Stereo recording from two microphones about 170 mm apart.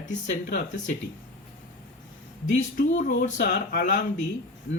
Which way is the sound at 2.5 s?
45° left (ahead or behind).